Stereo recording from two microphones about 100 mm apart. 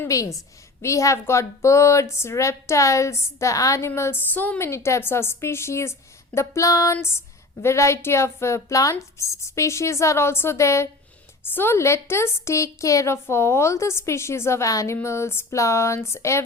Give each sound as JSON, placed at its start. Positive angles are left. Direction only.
{"t": 0.1, "sound": "a woman's voice", "side_deg": 35}